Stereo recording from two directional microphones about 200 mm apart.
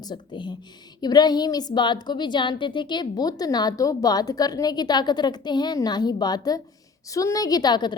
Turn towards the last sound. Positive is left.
turn(degrees=20)  # may be behind; listen again after turning